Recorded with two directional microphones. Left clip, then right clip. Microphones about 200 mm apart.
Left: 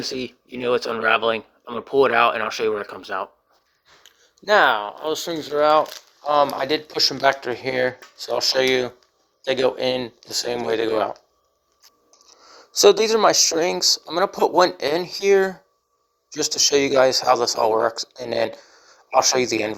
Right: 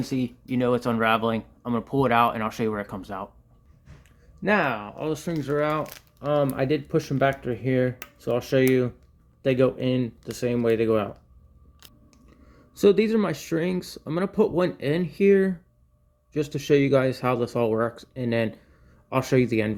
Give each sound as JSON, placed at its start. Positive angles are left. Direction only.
{"t": 0.0, "sound": "speech", "side_deg": 20}
{"t": 4.2, "sound": "a sound", "side_deg": 25}
{"t": 5.0, "sound": "speech", "side_deg": 20}
{"t": 12.5, "sound": "speech", "side_deg": 15}